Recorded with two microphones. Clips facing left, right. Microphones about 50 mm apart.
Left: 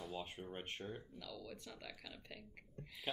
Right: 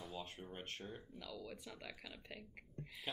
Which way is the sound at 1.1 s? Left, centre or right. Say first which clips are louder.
Right 1 dB; centre.